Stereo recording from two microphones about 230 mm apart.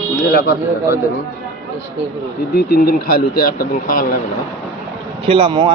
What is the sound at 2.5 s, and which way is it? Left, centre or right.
A man's voice, left.